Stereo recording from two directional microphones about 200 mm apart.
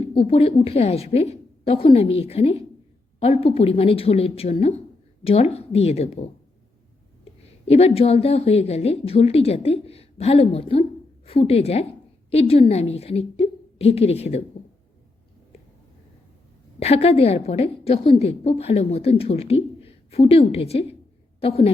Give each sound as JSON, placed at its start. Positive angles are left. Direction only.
{"t": 0.0, "sound": "a woman's voice", "side_deg": 25}
{"t": 7.7, "sound": "a woman's voice", "side_deg": 30}
{"t": 16.8, "sound": "a woman's voice", "side_deg": 30}